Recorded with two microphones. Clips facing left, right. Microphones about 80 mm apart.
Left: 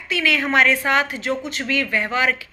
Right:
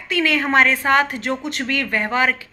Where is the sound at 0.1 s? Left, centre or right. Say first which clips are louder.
Right 2 dB; right.